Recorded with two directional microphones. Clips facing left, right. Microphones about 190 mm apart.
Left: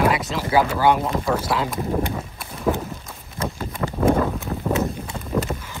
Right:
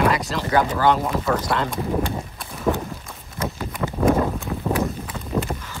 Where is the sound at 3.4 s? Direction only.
30° left (ahead or behind).